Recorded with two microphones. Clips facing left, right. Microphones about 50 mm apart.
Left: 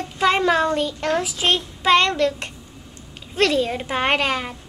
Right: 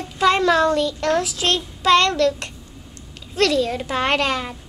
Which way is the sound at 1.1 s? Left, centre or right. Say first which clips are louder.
Left 1 dB; centre.